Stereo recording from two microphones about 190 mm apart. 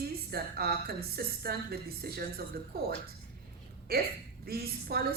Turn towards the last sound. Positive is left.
turn(degrees=-55)  # may be behind; listen again after turning